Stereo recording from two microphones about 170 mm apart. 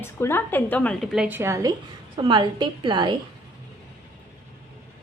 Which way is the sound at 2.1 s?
25° right (ahead or behind).